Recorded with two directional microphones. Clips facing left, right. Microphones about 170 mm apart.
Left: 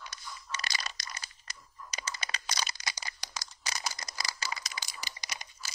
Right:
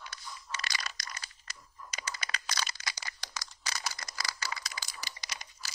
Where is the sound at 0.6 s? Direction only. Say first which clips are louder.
Left 1 dB; 30° left (ahead or behind).